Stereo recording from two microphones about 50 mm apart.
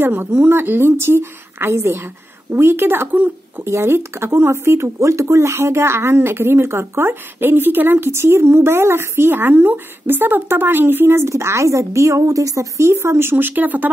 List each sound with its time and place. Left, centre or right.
0.0 s a woman's voice: right
2.5 s a woman's voice: right